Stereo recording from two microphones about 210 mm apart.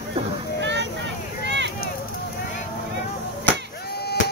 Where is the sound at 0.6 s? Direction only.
55° right (ahead or behind).